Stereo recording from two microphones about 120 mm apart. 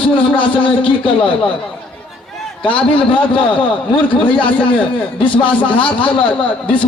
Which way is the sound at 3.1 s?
45° left (ahead or behind).